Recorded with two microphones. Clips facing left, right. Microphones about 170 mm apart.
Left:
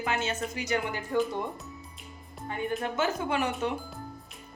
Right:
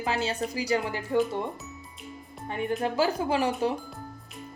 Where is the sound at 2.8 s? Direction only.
30° right (ahead or behind).